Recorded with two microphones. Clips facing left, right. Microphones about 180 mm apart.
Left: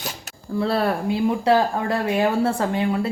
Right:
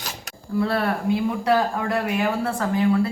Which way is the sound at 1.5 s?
30° left (ahead or behind).